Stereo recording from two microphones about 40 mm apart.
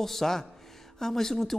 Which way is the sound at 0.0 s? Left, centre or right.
Centre.